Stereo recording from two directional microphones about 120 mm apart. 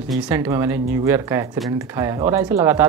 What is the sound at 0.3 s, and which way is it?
Speech, 20° right (ahead or behind).